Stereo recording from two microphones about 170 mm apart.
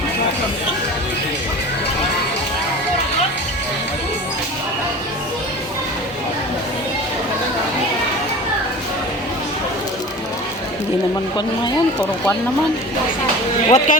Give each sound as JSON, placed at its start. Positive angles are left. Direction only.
{"t": 13.7, "sound": "speech", "side_deg": 45}